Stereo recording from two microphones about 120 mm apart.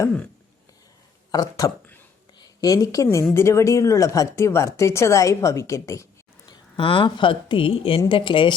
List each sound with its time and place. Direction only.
1.3 s a woman's voice: 30° left (ahead or behind)
6.5 s a woman's voice: 45° left (ahead or behind)